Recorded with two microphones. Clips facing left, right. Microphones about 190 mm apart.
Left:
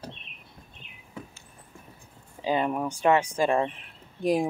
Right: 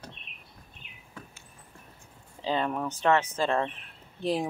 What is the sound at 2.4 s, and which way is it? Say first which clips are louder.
A woman's voice: left 3 dB; 15° left (ahead or behind).